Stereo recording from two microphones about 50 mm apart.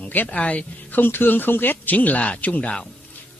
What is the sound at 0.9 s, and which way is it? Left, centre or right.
A man's voice, left.